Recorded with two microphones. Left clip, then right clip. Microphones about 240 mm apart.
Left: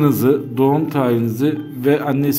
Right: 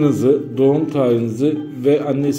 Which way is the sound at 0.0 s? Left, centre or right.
Left.